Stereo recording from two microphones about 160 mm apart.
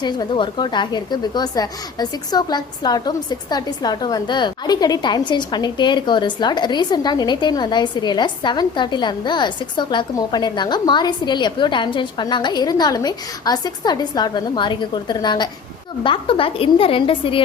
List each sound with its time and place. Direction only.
0.0 s a woman's voice: 30° left (ahead or behind)